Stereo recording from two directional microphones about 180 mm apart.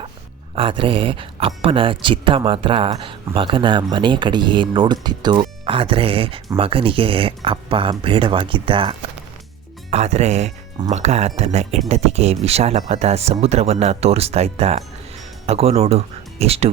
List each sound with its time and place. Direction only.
0.5 s speech: 30° right (ahead or behind)